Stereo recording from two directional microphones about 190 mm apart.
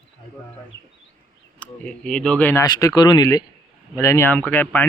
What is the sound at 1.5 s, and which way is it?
Speech, 10° left (ahead or behind).